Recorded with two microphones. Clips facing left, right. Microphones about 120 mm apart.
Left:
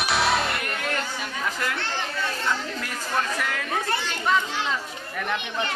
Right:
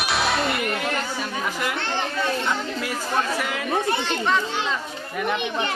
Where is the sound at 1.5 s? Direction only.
10° right (ahead or behind).